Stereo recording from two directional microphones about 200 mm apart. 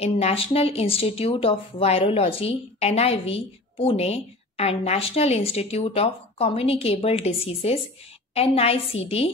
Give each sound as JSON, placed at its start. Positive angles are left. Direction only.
{"t": 0.0, "sound": "a woman's voice", "side_deg": 30}